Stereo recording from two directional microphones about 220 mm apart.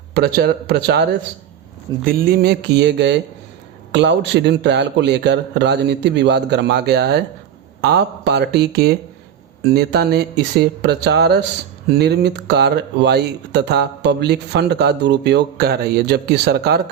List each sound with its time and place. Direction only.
0.1 s speech: 45° right (ahead or behind)
2.0 s speech: 40° right (ahead or behind)